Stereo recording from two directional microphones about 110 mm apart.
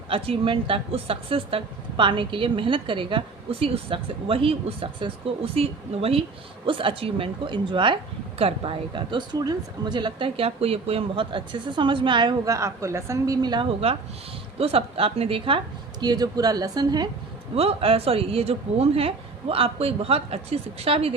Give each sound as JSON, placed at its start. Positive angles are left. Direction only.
{"t": 0.1, "sound": "speech", "side_deg": -55}
{"t": 8.4, "sound": "speech", "side_deg": -60}
{"t": 12.5, "sound": "speech", "side_deg": -25}
{"t": 14.6, "sound": "speech", "side_deg": -60}
{"t": 16.0, "sound": "speech", "side_deg": -35}
{"t": 17.5, "sound": "speech", "side_deg": -65}